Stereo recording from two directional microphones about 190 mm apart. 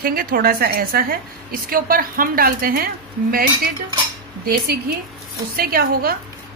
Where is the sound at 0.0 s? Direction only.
50° right (ahead or behind).